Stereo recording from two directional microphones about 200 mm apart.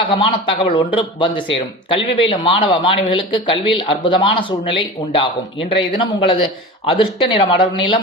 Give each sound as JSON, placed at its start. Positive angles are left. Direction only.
{"t": 0.1, "sound": "a man's voice", "side_deg": 25}